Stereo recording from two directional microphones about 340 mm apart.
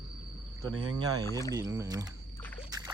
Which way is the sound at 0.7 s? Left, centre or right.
Right.